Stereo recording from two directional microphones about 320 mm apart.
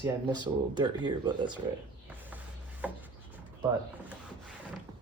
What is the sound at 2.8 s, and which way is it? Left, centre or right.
Wood, centre.